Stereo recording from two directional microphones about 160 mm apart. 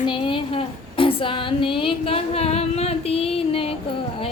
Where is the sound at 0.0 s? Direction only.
30° left (ahead or behind).